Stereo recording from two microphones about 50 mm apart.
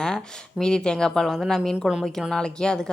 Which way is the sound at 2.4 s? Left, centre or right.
Centre.